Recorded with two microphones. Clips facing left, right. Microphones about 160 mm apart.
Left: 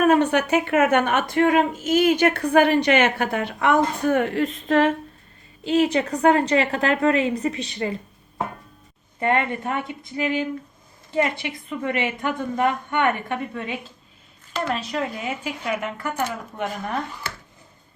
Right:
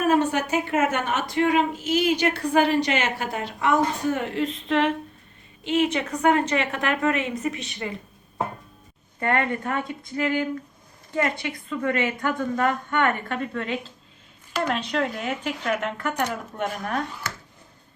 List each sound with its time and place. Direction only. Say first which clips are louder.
0.0 s a woman's voice: left 3 dB; 65° left (ahead or behind); by 7.9 s 35° left (ahead or behind)
9.2 s a woman's voice: left 2 dB; 20° left (ahead or behind); by 17.0 s centre (ahead or behind)